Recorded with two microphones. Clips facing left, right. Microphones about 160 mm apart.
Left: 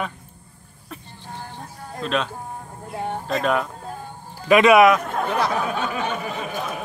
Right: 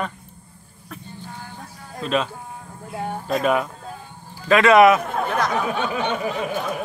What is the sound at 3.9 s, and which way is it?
Music, 50° left (ahead or behind).